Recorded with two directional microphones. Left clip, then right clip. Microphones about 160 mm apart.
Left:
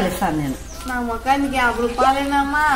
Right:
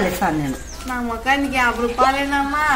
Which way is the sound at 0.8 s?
15° right (ahead or behind).